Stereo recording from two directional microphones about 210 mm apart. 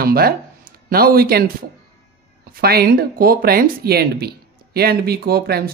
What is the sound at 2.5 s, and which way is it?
Speech, 45° right (ahead or behind).